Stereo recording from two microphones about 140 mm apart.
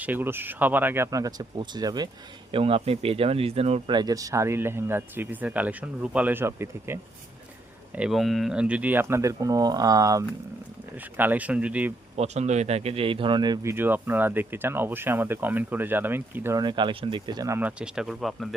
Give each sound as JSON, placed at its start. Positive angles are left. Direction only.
{"t": 0.0, "sound": "speech", "side_deg": -15}
{"t": 2.5, "sound": "speech", "side_deg": -40}
{"t": 3.9, "sound": "speech", "side_deg": -25}
{"t": 7.9, "sound": "speech", "side_deg": -5}
{"t": 10.9, "sound": "speech", "side_deg": -10}
{"t": 12.1, "sound": "speech", "side_deg": -50}
{"t": 13.7, "sound": "speech", "side_deg": -15}
{"t": 16.6, "sound": "speech", "side_deg": -35}
{"t": 17.6, "sound": "speech", "side_deg": -10}